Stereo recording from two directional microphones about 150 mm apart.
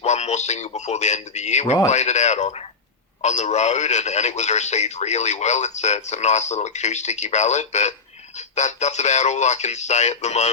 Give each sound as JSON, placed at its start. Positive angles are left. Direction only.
{"t": 0.0, "sound": "a man's voice", "side_deg": 50}